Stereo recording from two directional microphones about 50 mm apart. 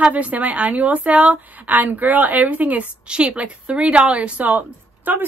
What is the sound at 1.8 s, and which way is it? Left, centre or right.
A woman's voice, right.